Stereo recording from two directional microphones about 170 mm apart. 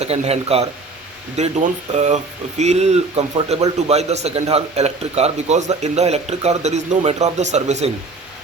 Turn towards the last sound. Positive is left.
turn(degrees=-40)  # may be behind; listen again after turning